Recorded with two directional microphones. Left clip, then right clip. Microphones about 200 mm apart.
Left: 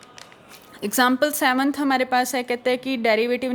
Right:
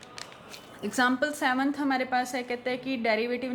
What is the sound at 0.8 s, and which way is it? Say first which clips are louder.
A woman's voice: left 7 dB; 55° left (ahead or behind).